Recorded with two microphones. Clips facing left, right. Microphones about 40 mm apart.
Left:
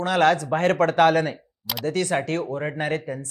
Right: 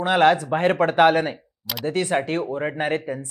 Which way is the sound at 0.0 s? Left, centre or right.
Centre.